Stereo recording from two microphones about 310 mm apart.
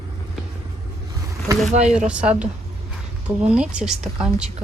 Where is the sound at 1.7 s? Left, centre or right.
Right.